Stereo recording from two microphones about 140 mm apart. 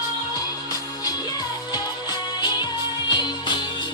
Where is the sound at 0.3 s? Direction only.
25° left (ahead or behind).